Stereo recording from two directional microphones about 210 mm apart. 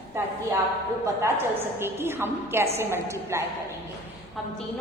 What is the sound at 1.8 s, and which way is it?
A woman's voice, 10° right (ahead or behind).